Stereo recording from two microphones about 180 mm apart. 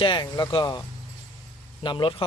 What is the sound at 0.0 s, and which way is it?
Speech, 25° left (ahead or behind).